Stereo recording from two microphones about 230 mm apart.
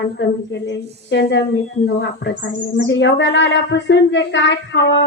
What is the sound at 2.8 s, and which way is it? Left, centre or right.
Speech, left.